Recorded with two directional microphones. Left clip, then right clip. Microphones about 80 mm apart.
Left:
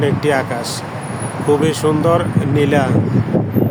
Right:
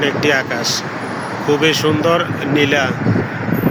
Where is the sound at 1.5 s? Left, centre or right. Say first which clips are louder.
Right 1 dB; left.